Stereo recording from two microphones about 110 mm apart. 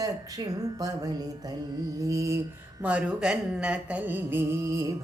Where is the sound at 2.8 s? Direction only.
10° right (ahead or behind).